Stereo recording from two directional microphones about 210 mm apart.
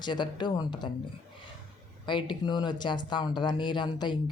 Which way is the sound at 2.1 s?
20° left (ahead or behind).